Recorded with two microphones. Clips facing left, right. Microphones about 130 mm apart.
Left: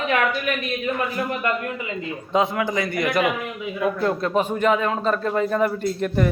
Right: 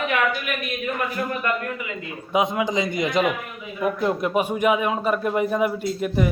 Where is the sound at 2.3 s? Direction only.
15° right (ahead or behind).